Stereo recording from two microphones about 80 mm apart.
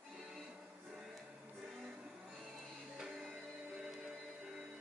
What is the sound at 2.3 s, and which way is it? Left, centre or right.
Music, centre.